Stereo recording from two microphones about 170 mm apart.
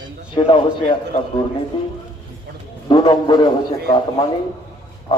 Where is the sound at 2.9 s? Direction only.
25° left (ahead or behind).